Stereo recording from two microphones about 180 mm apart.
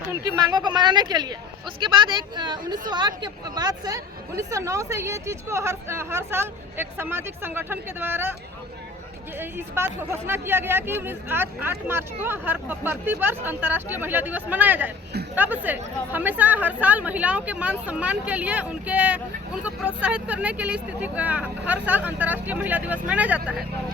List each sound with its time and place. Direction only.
0.1 s speech: 25° right (ahead or behind)
9.4 s speech: 10° right (ahead or behind)